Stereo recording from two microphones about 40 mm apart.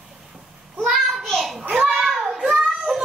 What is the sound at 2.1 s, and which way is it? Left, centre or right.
Child singing, centre.